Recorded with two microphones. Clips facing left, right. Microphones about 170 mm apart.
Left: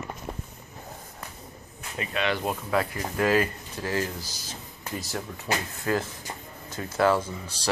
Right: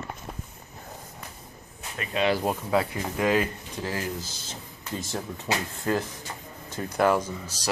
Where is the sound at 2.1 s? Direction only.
35° right (ahead or behind).